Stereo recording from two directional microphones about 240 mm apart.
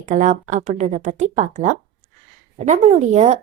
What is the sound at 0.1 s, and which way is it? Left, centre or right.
Speech, right.